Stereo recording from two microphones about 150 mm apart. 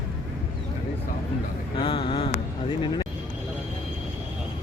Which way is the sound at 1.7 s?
35° left (ahead or behind).